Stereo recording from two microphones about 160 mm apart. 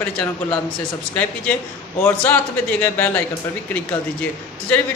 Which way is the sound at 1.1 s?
10° left (ahead or behind).